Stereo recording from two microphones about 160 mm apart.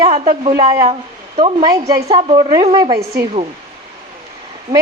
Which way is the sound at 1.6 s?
20° right (ahead or behind).